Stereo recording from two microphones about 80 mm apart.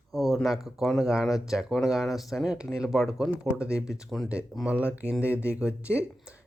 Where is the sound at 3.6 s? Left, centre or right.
Centre.